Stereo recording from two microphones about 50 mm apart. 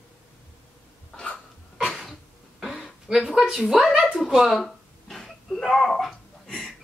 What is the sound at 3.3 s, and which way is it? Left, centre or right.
Speech, centre.